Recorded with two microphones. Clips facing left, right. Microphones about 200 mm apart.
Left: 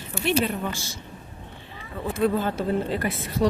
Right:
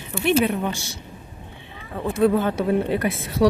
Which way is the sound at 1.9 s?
60° right (ahead or behind).